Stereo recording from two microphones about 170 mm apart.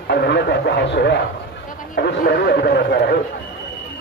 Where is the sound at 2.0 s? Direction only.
70° left (ahead or behind).